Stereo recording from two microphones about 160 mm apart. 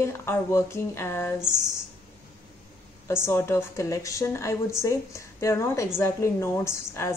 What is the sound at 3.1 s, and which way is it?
A woman's voice, 15° left (ahead or behind).